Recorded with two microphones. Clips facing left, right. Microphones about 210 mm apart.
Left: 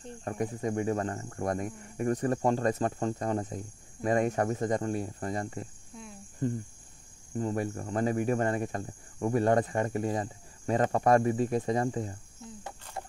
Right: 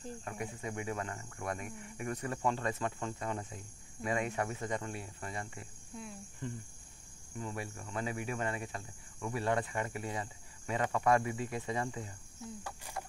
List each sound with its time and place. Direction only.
0.2 s speech: 40° left (ahead or behind)
13.0 s clip-clop: 25° left (ahead or behind)